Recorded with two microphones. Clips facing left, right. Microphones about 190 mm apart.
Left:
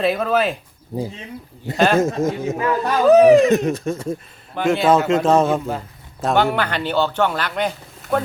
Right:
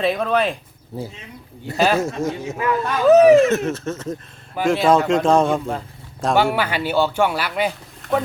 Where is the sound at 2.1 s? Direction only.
35° left (ahead or behind).